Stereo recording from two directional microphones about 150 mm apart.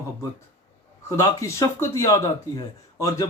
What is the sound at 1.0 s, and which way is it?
Speech, 20° left (ahead or behind).